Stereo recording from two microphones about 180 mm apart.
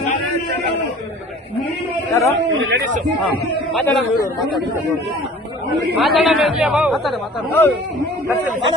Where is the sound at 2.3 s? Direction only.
70° right (ahead or behind).